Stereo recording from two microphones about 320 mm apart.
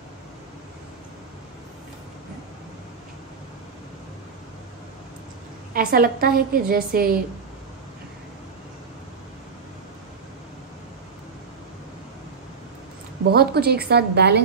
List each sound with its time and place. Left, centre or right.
5.7 s a woman's voice: right
13.2 s a woman's voice: right